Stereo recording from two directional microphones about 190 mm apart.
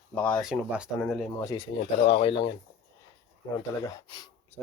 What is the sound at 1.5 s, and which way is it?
Speech, 30° left (ahead or behind).